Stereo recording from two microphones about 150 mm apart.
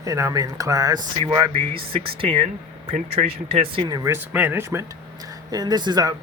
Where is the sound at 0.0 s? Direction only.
20° right (ahead or behind).